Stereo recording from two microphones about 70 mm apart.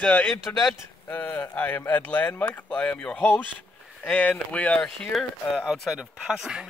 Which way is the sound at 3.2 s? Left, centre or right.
Left.